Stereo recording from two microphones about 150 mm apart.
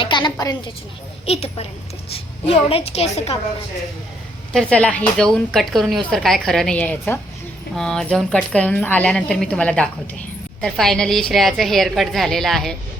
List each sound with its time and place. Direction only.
0.0 s a woman's voice: 30° left (ahead or behind)
1.2 s a child's voice: 40° left (ahead or behind)
4.5 s a woman's voice: 5° left (ahead or behind)